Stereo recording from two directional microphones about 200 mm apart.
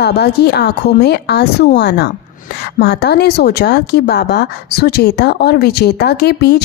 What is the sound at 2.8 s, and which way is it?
Speech, 55° left (ahead or behind).